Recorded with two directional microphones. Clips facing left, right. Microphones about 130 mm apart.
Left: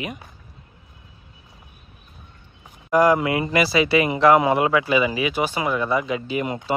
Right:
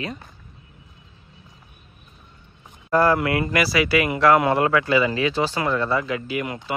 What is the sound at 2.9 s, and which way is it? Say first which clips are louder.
Speech: left 2 dB; 15° left (ahead or behind).